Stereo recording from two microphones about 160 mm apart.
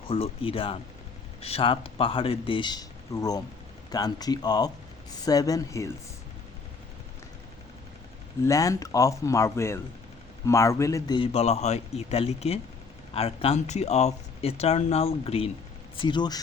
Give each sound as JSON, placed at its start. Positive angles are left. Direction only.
{"t": 0.1, "sound": "speech", "side_deg": 35}
{"t": 8.4, "sound": "speech", "side_deg": 20}
{"t": 11.2, "sound": "speech", "side_deg": 40}